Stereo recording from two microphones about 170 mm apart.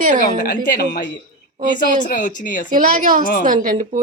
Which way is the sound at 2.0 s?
50° left (ahead or behind).